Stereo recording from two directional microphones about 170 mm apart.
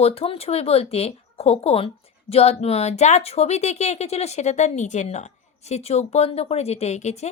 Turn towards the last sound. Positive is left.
turn(degrees=40)  # may be behind; listen again after turning